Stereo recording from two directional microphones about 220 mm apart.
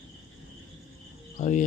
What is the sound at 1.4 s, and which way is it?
Speech, 35° left (ahead or behind).